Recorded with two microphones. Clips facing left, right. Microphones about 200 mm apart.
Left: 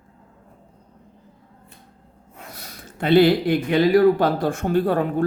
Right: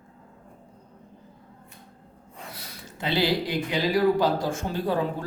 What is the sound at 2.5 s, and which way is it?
Speech, 55° left (ahead or behind).